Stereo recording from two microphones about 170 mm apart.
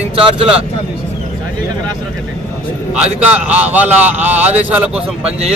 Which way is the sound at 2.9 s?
10° right (ahead or behind).